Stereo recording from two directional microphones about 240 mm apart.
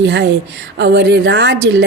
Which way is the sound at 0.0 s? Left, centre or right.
Right.